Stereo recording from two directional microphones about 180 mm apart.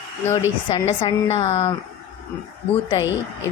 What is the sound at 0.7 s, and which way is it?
Speech, 35° left (ahead or behind).